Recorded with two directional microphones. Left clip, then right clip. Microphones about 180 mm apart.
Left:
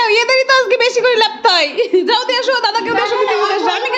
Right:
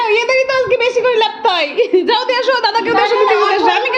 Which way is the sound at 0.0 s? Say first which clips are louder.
Left 1 dB; 15° left (ahead or behind).